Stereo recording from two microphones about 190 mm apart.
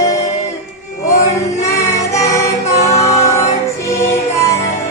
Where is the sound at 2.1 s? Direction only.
15° left (ahead or behind).